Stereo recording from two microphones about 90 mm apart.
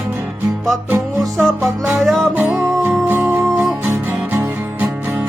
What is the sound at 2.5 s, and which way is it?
Music, 25° right (ahead or behind).